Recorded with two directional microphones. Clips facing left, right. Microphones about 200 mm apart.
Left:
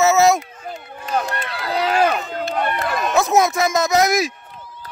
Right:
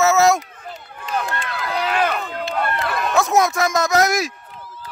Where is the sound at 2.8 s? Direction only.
15° left (ahead or behind).